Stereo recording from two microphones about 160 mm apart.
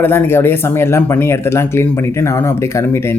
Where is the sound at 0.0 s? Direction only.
15° left (ahead or behind).